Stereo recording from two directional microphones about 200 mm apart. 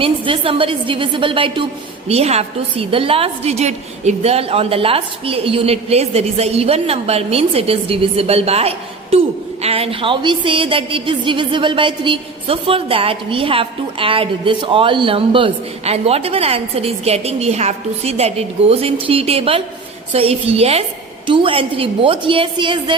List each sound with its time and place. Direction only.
0.0 s a woman's voice: 25° right (ahead or behind)